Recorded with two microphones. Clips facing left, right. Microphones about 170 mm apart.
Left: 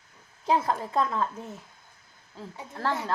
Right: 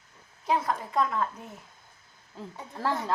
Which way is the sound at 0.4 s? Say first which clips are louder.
Left 2 dB; 30° left (ahead or behind).